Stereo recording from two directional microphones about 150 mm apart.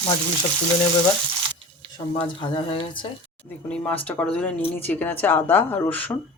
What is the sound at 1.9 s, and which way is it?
Speech, 35° left (ahead or behind).